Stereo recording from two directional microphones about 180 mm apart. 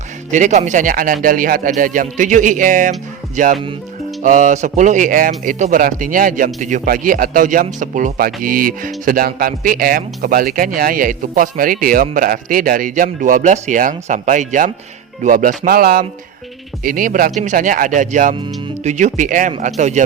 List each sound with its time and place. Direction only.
0.3 s a man's voice: 45° right (ahead or behind)